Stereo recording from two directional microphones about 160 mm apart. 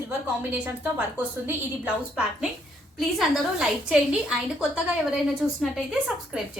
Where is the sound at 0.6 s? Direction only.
10° right (ahead or behind).